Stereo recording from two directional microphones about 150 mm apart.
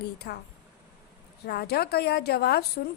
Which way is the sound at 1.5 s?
90° left.